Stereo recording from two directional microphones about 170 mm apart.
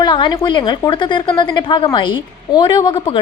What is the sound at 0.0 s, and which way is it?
A woman's voice, 25° left (ahead or behind).